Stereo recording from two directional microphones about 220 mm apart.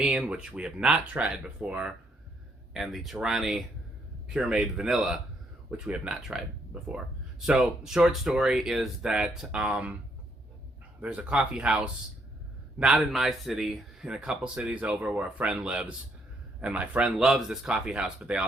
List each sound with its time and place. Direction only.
0.0 s speech: 5° right (ahead or behind)
11.0 s speech: 5° right (ahead or behind)